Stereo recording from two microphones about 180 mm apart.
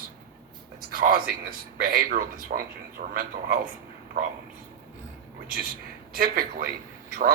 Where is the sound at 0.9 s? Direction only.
55° right (ahead or behind).